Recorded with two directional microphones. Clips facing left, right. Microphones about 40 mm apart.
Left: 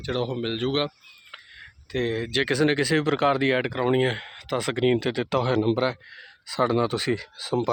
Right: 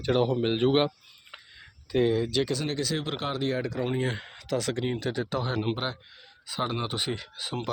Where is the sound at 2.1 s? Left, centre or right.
Left.